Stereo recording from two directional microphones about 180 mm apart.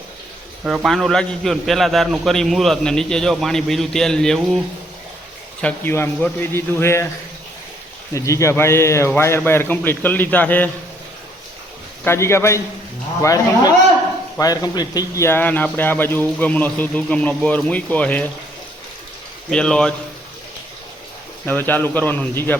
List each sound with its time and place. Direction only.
0.6 s a man's voice: 5° right (ahead or behind)
5.6 s a man's voice: 15° left (ahead or behind)
8.1 s a man's voice: 15° left (ahead or behind)
12.0 s a man's voice: 15° left (ahead or behind)
19.5 s a man's voice: 5° left (ahead or behind)
21.4 s a man's voice: 10° left (ahead or behind)